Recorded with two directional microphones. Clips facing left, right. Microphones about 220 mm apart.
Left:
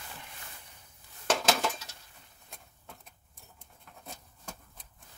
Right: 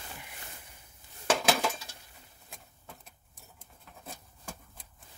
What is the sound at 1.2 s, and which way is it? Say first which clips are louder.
Dishes: right 1 dB; 5° right (ahead or behind).